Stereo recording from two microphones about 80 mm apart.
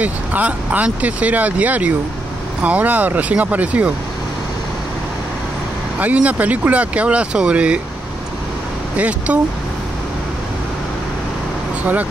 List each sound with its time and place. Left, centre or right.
0.0 s speech: centre
5.9 s speech: centre
8.9 s speech: centre
11.8 s speech: right